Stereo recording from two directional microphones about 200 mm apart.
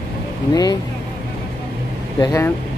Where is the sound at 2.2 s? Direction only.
15° left (ahead or behind).